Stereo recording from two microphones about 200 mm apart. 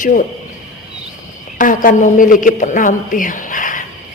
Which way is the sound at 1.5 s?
40° left (ahead or behind).